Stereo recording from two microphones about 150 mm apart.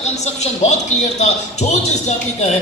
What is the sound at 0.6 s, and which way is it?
A woman's voice, 50° left (ahead or behind).